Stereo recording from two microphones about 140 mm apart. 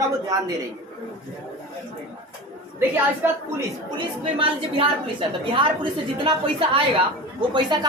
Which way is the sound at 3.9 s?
40° right (ahead or behind).